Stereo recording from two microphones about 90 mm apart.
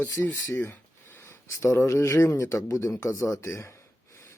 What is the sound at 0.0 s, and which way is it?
Speech, 20° left (ahead or behind).